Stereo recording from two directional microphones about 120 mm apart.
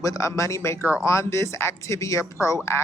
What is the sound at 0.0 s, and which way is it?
Speech, 25° left (ahead or behind).